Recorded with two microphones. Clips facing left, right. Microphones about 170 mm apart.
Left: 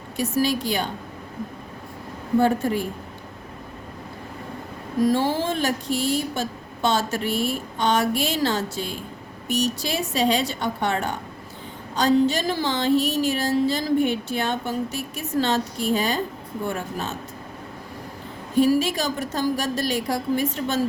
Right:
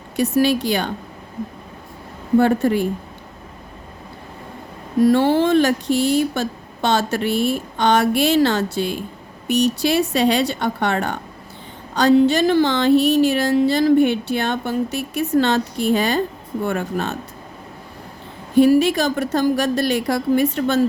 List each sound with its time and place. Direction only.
0.2 s speech: 70° right (ahead or behind)
2.4 s speech: 70° right (ahead or behind)
5.0 s speech: 65° right (ahead or behind)
18.5 s speech: 65° right (ahead or behind)